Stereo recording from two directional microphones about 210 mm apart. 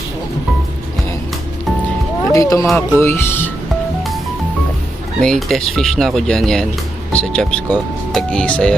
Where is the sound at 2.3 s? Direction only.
15° left (ahead or behind).